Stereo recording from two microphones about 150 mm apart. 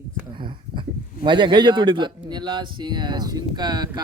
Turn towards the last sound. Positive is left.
turn(degrees=-30)  # may be behind; listen again after turning